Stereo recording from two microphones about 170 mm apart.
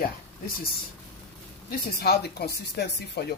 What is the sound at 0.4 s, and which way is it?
Speech, 60° left (ahead or behind).